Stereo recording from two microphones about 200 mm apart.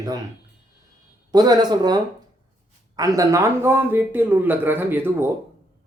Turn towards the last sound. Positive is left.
turn(degrees=-10)  # may be behind; listen again after turning